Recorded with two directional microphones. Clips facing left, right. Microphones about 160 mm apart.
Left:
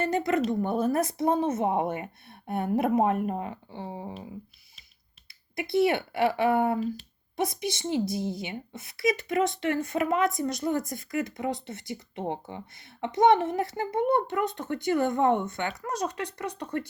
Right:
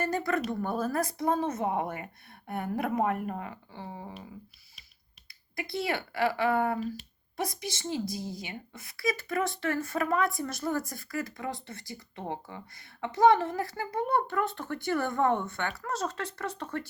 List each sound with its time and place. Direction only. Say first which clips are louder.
0.0 s a woman's voice: left 4 dB; 20° left (ahead or behind)
5.5 s a woman's voice: left 8 dB; 20° left (ahead or behind)